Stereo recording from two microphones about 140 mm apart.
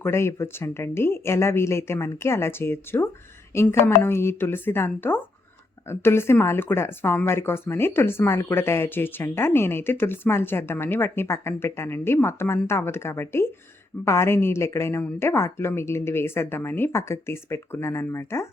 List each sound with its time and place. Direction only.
0.0 s speech: 20° left (ahead or behind)